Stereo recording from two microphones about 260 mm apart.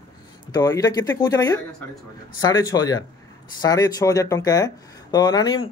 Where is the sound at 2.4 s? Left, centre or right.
Centre.